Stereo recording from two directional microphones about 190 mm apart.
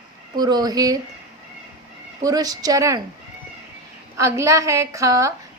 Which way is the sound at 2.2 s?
20° right (ahead or behind).